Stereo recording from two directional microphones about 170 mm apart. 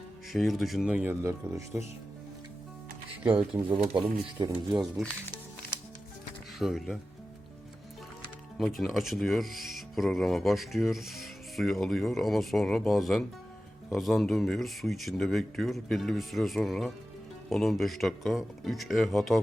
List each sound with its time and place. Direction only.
0.3 s speech: centre (ahead or behind); by 1.8 s 15° right (ahead or behind)
3.2 s speech: 5° right (ahead or behind)
4.4 s speech: 25° right (ahead or behind)
4.8 s speech: centre (ahead or behind)
6.6 s speech: centre (ahead or behind)
8.5 s speech: centre (ahead or behind)